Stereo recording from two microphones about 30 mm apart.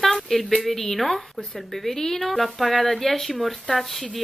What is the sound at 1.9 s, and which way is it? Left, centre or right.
Speech, centre.